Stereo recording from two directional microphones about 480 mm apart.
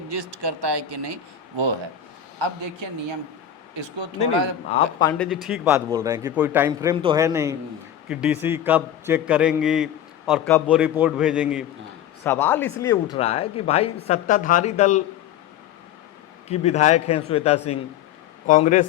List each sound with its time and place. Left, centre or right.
0.1 s speech: right
2.8 s speech: right
4.7 s a man's voice: centre
16.5 s speech: centre